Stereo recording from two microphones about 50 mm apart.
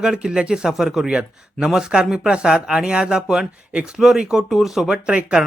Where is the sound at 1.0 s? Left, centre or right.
Centre.